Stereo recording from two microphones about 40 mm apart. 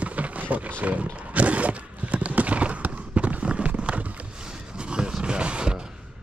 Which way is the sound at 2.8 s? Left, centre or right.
Right.